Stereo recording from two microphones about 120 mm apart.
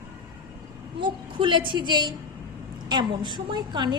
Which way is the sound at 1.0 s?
45° right (ahead or behind).